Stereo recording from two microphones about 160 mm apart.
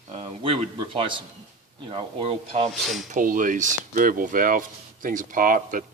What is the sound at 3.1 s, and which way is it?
Speech, 55° right (ahead or behind).